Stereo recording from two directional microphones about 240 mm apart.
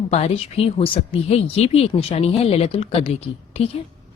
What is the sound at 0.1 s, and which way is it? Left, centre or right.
Speech, left.